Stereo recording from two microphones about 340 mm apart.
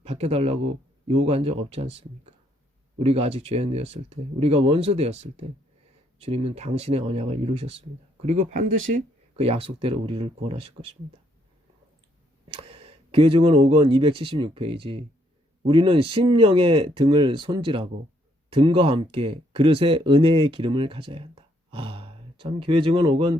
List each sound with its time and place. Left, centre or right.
0.0 s speech: centre
12.5 s speech: centre